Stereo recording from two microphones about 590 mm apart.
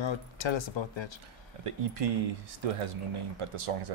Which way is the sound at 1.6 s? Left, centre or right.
Right.